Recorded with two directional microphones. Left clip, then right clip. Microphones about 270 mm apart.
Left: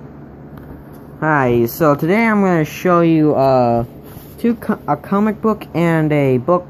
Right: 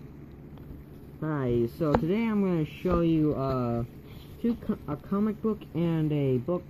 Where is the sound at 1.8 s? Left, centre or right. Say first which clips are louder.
Left 13 dB; left.